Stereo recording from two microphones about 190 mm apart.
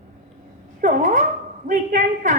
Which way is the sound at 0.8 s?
45° right (ahead or behind).